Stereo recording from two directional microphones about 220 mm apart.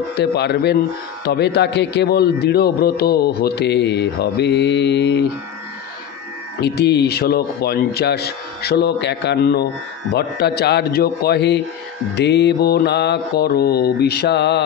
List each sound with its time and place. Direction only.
0.1 s a man's voice: 50° left (ahead or behind)
6.6 s a man's voice: 50° left (ahead or behind)